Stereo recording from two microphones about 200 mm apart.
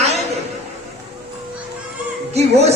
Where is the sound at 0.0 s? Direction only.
35° right (ahead or behind).